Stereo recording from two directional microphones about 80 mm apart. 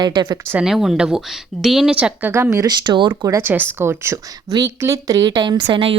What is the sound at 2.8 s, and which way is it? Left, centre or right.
Speech, right.